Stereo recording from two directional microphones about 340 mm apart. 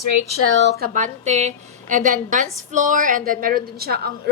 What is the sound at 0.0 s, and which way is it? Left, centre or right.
Speech, right.